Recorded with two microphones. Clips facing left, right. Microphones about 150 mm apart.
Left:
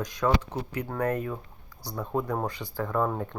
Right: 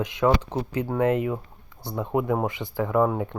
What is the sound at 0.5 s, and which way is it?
Speech, 30° right (ahead or behind).